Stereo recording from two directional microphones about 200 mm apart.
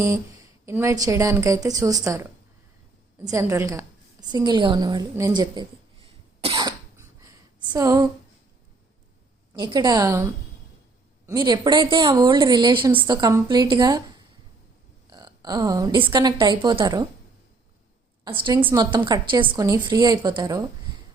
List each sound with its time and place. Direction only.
0.6 s a woman's voice: 15° right (ahead or behind)
3.2 s a woman's voice: 15° right (ahead or behind)
6.6 s a sound: 15° right (ahead or behind)
9.6 s a woman's voice: 20° right (ahead or behind)
11.3 s a woman's voice: 20° right (ahead or behind)
15.1 s a woman's voice: 20° right (ahead or behind)
18.3 s a woman's voice: 25° right (ahead or behind)